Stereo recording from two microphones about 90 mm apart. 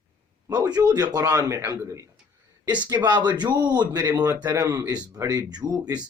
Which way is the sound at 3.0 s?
55° right (ahead or behind).